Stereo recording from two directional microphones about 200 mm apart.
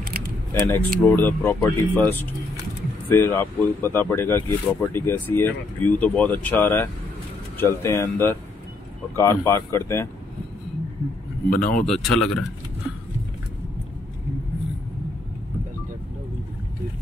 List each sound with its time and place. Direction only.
0.7 s speech: 10° left (ahead or behind)
11.5 s speech: 45° left (ahead or behind)
11.8 s speech: centre (ahead or behind)